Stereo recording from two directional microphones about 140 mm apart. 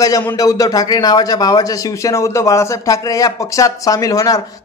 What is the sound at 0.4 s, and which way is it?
A man's voice, 25° left (ahead or behind).